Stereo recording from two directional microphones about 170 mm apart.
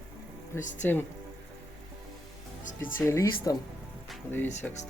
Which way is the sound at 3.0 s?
20° left (ahead or behind).